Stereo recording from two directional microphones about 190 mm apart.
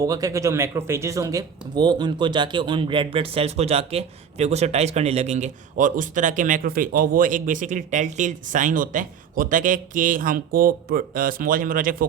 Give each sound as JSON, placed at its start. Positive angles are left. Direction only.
{"t": 0.0, "sound": "speech", "side_deg": -20}